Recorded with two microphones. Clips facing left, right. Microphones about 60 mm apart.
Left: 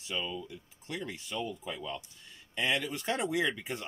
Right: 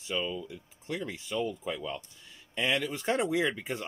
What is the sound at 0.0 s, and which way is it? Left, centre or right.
Speech, right.